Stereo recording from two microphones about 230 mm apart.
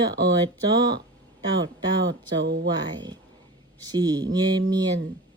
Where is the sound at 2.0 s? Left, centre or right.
Right.